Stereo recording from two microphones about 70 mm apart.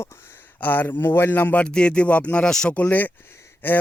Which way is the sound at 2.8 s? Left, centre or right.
Left.